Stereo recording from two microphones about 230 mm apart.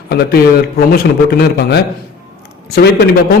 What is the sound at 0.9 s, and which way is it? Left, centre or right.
Speech, left.